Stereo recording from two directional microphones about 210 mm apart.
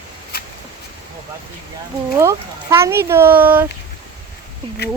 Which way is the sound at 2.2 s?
10° right (ahead or behind).